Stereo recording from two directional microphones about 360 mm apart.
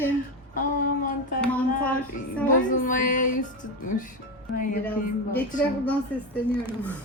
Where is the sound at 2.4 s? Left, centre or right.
Left.